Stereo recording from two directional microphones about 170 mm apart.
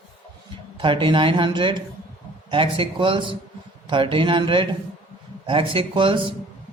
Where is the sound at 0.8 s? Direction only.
30° right (ahead or behind).